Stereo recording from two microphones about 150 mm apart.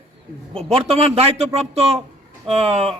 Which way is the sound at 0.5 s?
Centre (ahead or behind).